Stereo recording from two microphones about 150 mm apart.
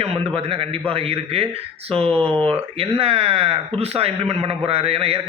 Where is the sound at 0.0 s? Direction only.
40° right (ahead or behind).